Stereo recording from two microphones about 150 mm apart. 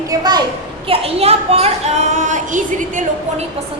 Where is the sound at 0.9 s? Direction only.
40° right (ahead or behind); by 3.4 s 60° right (ahead or behind).